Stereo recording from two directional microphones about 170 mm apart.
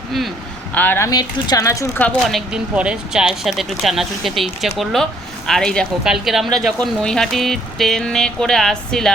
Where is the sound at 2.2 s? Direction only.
Centre (ahead or behind).